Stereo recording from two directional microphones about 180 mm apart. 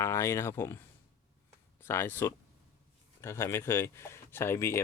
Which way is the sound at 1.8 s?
10° left (ahead or behind).